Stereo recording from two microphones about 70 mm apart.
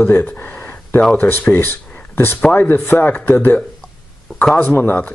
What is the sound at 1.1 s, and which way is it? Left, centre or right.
Speech, left.